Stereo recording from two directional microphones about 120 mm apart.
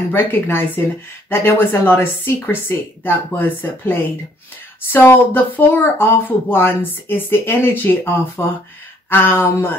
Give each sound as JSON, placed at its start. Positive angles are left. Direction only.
{"t": 0.1, "sound": "speech", "side_deg": 15}